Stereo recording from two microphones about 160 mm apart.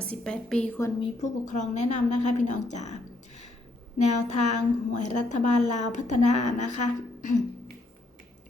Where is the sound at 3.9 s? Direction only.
45° left (ahead or behind).